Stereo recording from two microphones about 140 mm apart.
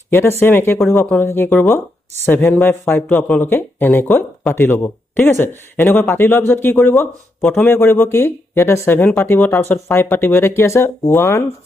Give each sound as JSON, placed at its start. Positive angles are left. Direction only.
{"t": 0.1, "sound": "speech", "side_deg": 15}